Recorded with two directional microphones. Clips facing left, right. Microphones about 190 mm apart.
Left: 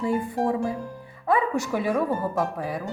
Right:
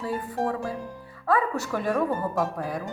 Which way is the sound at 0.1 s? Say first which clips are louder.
Left 2 dB; 15° left (ahead or behind).